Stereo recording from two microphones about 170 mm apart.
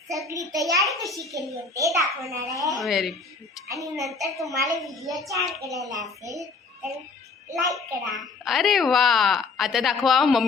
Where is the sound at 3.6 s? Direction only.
20° right (ahead or behind).